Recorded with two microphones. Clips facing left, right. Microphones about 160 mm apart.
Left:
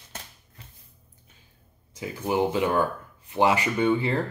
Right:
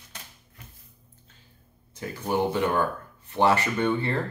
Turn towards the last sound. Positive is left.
turn(degrees=10)  # may be behind; listen again after turning